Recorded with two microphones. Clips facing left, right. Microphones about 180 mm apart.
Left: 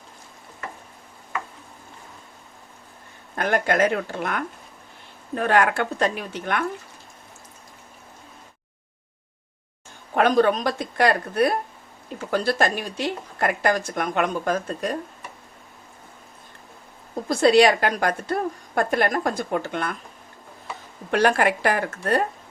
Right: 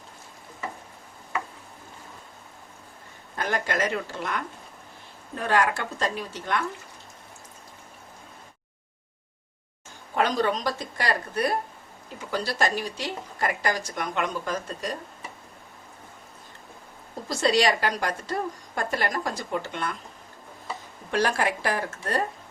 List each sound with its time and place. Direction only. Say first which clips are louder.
3.3 s a woman's voice: left 6 dB; 60° left (ahead or behind)
10.2 s a woman's voice: left 6 dB; 60° left (ahead or behind)
17.2 s a woman's voice: left 7 dB; 55° left (ahead or behind)
21.1 s a woman's voice: left 5 dB; 60° left (ahead or behind)